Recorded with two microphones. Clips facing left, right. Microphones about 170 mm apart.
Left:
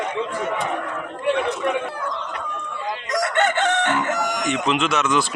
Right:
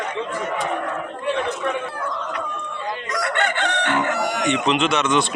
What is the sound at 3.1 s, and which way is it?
Chicken, 45° left (ahead or behind).